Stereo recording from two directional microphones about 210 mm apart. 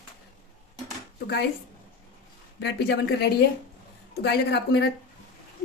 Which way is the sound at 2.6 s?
55° left (ahead or behind).